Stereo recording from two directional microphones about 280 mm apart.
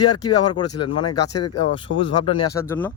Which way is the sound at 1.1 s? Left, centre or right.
Left.